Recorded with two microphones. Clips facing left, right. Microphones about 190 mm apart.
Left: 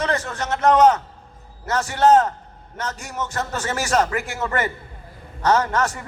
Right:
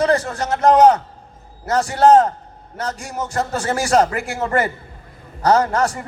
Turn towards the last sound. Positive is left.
turn(degrees=-35)  # may be behind; listen again after turning